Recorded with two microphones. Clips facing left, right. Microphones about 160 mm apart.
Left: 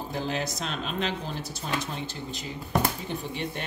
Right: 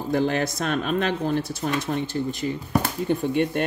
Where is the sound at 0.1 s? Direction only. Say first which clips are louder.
Right 10 dB; 55° right (ahead or behind).